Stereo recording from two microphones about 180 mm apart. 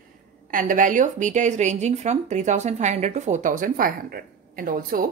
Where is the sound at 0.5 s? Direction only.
50° right (ahead or behind).